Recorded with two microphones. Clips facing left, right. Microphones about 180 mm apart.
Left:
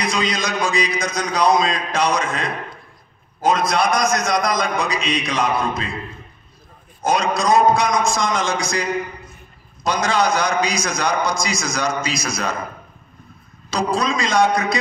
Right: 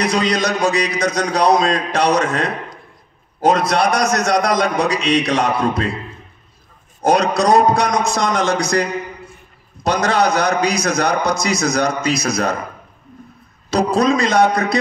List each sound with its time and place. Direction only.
0.0 s a man's voice: 70° right (ahead or behind)
7.0 s a man's voice: 70° right (ahead or behind)
9.8 s a man's voice: 65° right (ahead or behind)
13.7 s a man's voice: 60° right (ahead or behind)